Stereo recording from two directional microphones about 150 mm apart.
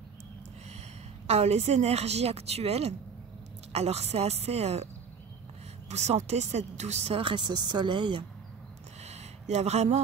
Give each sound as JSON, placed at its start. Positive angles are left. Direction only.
{"t": 0.7, "sound": "a woman's voice", "side_deg": -45}
{"t": 5.9, "sound": "speech", "side_deg": -50}
{"t": 9.0, "sound": "a sound", "side_deg": -45}